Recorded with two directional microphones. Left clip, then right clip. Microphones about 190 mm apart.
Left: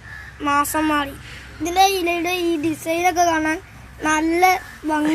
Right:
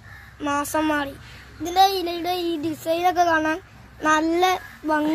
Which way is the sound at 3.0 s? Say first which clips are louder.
Left 2 dB; 35° right (ahead or behind).